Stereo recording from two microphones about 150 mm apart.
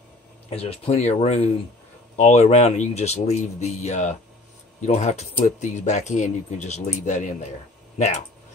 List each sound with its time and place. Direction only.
0.5 s speech: 40° left (ahead or behind)